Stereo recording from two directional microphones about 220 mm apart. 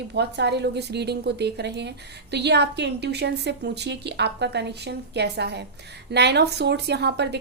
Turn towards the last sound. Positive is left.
turn(degrees=-50)  # may be behind; listen again after turning